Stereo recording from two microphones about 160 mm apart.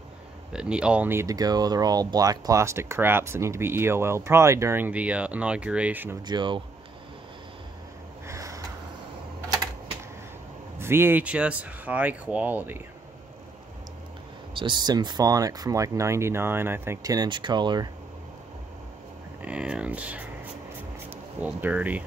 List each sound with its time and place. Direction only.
0.5 s speech: 5° right (ahead or behind)
6.2 s speech: 30° right (ahead or behind)
8.3 s a sound: 20° right (ahead or behind)
10.8 s speech: 15° right (ahead or behind)
14.5 s speech: 30° right (ahead or behind)
19.4 s speech: 5° right (ahead or behind)